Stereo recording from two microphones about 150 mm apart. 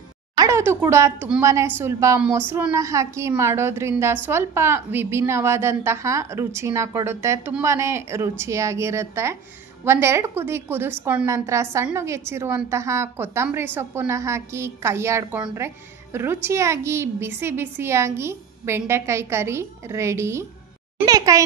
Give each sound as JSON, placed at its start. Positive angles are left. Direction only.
{"t": 0.4, "sound": "a woman's voice", "side_deg": -20}